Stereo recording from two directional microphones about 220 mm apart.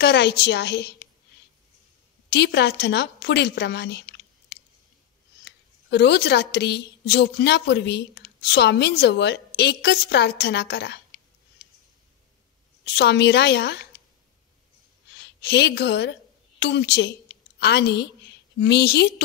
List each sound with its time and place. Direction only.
0.0 s a woman's voice: 50° left (ahead or behind)
2.2 s a woman's voice: 50° left (ahead or behind)
12.8 s a woman's voice: 50° left (ahead or behind)
15.1 s a woman's voice: 50° left (ahead or behind)